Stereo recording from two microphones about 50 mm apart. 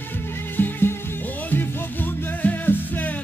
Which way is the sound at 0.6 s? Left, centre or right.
Left.